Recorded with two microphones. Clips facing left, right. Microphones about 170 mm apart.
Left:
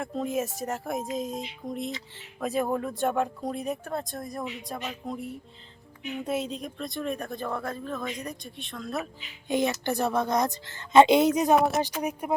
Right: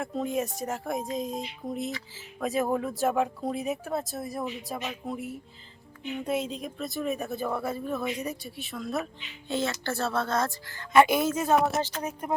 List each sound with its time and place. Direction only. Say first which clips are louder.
0.0 s speech: even; centre (ahead or behind)
9.5 s speech: left 4 dB; 15° left (ahead or behind)